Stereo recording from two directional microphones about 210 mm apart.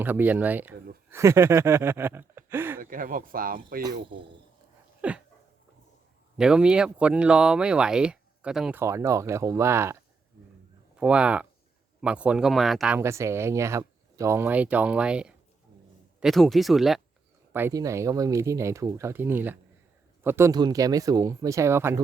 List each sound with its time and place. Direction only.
0.0 s speech: 10° right (ahead or behind)
2.7 s speech: 40° right (ahead or behind)
4.9 s dog: 5° right (ahead or behind)
6.3 s speech: 5° right (ahead or behind)
8.8 s speech: 15° right (ahead or behind)
13.0 s speech: 15° right (ahead or behind)
17.5 s speech: 10° right (ahead or behind)